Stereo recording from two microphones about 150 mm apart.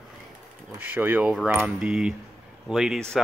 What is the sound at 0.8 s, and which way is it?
Speech, 10° right (ahead or behind).